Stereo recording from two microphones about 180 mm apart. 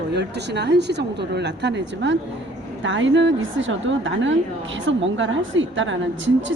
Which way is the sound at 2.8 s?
90° right.